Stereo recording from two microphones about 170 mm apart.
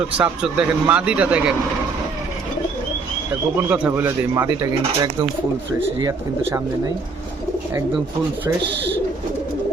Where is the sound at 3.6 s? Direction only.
10° right (ahead or behind); by 6.1 s 25° right (ahead or behind).